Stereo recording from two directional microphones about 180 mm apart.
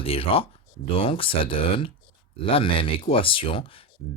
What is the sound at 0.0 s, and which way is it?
Speech, 30° left (ahead or behind).